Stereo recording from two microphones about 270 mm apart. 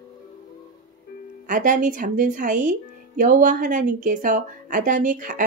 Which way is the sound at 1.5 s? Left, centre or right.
Right.